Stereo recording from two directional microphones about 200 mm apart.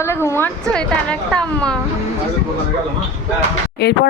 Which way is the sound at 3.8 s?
55° left (ahead or behind).